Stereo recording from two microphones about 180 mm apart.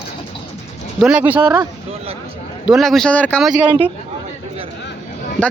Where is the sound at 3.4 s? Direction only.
5° right (ahead or behind).